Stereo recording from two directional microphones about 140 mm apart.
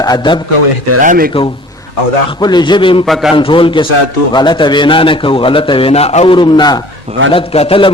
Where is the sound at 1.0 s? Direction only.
90° right.